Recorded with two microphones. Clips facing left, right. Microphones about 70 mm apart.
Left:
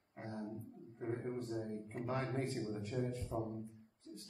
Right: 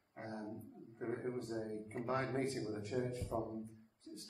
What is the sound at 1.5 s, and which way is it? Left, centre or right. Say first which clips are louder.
A man's voice: even; right.